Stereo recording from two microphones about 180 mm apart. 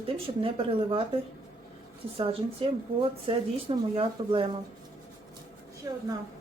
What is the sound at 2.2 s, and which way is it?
A woman's voice, 30° right (ahead or behind).